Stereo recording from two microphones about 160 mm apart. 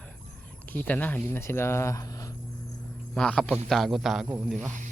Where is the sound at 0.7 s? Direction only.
10° left (ahead or behind).